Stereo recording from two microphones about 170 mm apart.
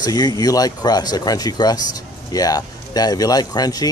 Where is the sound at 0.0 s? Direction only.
25° left (ahead or behind).